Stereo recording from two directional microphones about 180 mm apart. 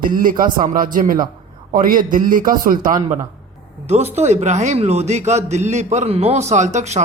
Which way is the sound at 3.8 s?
40° right (ahead or behind).